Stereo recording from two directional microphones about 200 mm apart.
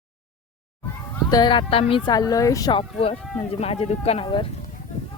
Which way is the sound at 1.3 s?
20° left (ahead or behind).